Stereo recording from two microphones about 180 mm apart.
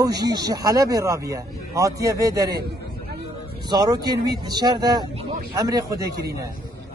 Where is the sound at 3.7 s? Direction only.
20° right (ahead or behind).